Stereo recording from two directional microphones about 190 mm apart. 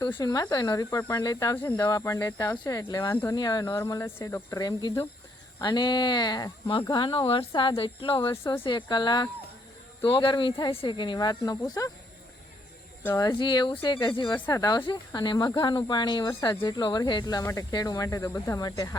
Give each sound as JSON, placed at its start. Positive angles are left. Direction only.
{"t": 0.2, "sound": "speech", "side_deg": 20}
{"t": 13.0, "sound": "speech", "side_deg": 15}